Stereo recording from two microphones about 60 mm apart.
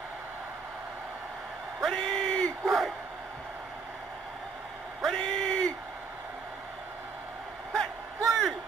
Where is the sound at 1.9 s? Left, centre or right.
Centre.